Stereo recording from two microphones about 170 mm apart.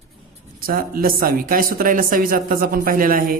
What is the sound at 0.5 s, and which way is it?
Speech, 60° right (ahead or behind).